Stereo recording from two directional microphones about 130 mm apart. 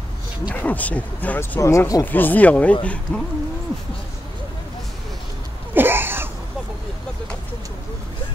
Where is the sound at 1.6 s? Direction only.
25° left (ahead or behind).